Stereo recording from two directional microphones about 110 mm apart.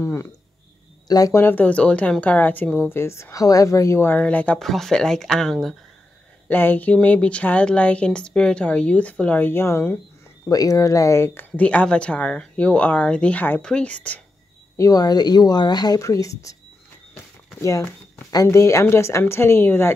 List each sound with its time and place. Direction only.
0.0 s speech: 20° left (ahead or behind)
1.0 s speech: 35° left (ahead or behind)
1.4 s speech: 15° left (ahead or behind)
2.9 s a woman's voice: 25° left (ahead or behind)
4.6 s speech: centre (ahead or behind)
6.5 s speech: 20° left (ahead or behind)
14.8 s speech: 35° left (ahead or behind)
17.6 s a woman's voice: 30° left (ahead or behind)